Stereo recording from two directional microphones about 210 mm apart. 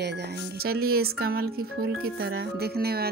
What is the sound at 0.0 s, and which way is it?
Speech, 55° right (ahead or behind).